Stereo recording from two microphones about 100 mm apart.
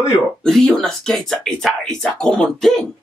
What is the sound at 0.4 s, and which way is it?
Speech, 5° left (ahead or behind).